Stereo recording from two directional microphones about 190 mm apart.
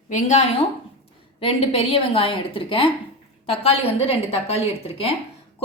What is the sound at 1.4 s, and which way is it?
A woman's voice, 30° left (ahead or behind).